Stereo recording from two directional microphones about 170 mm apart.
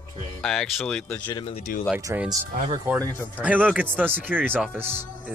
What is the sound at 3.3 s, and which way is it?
Speech, 10° right (ahead or behind).